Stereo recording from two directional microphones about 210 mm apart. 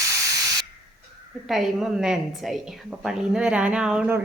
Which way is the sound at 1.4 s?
Centre (ahead or behind).